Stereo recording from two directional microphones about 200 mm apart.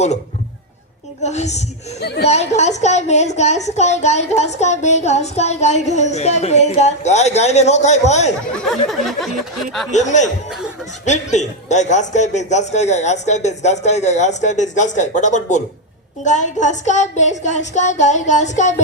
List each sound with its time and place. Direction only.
1.2 s a woman's voice: 35° left (ahead or behind)
2.0 s speech: 55° left (ahead or behind)
2.2 s a woman's voice: 35° left (ahead or behind)
8.6 s a sound: centre (ahead or behind)
9.9 s a woman's voice: 35° left (ahead or behind)